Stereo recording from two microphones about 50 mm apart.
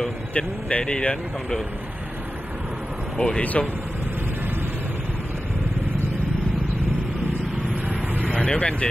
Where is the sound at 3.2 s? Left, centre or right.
Centre.